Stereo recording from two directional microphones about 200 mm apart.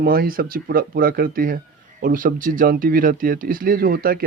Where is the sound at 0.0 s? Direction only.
50° right (ahead or behind).